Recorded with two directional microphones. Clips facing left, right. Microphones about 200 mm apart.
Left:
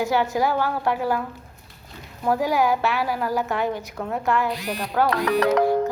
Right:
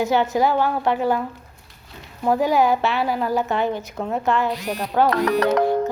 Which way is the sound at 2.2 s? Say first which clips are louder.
Right 3 dB; 20° right (ahead or behind).